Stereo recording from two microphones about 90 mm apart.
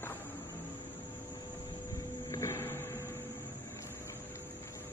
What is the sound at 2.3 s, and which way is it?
Vehicle, 30° left (ahead or behind).